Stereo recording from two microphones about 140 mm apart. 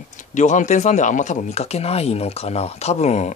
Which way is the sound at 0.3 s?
60° left (ahead or behind).